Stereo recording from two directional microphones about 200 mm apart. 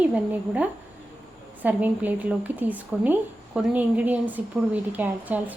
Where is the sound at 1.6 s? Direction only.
10° right (ahead or behind).